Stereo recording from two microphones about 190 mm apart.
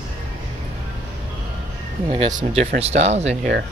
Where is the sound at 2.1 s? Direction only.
35° right (ahead or behind).